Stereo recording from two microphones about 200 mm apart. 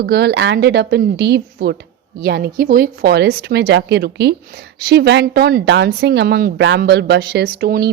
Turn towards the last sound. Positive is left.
turn(degrees=-50)  # may be behind; listen again after turning